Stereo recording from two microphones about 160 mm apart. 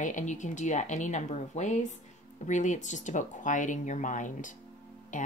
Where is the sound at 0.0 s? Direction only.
50° left (ahead or behind).